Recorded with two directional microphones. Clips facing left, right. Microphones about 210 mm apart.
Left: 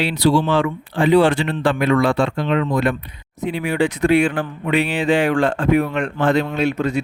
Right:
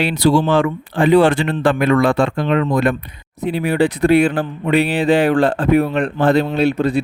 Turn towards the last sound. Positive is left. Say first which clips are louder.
# right 4 dB
turn(degrees=-35)  # may be behind; listen again after turning